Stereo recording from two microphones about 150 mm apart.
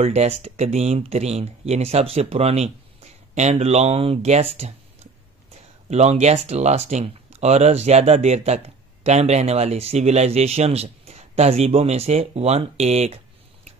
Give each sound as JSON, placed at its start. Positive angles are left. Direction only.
{"t": 0.0, "sound": "speech", "side_deg": -45}
{"t": 5.9, "sound": "speech", "side_deg": -45}